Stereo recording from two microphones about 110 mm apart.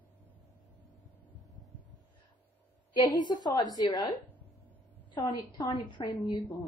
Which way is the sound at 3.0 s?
40° left (ahead or behind).